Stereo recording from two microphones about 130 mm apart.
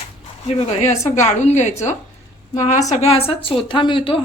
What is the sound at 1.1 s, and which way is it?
A woman's voice, 65° left (ahead or behind).